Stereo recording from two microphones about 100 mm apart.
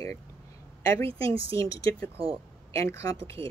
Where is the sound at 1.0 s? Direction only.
65° right (ahead or behind).